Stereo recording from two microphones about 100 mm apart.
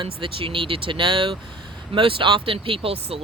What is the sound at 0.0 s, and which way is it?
A woman's voice, 60° right (ahead or behind).